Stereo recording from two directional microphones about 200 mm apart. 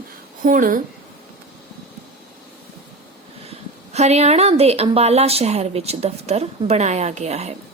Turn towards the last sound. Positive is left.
turn(degrees=-35)  # may be behind; listen again after turning